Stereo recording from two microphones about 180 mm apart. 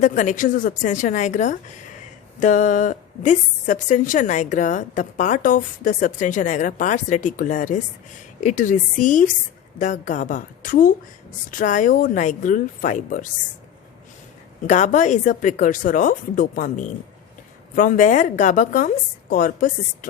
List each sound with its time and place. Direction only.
0.0 s a woman's voice: 45° left (ahead or behind)
14.7 s a woman's voice: 45° left (ahead or behind)